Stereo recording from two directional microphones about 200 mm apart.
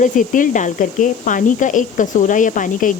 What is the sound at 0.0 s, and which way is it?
A woman's voice, 40° left (ahead or behind).